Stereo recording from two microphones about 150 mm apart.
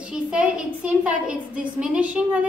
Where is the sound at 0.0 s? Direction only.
5° right (ahead or behind).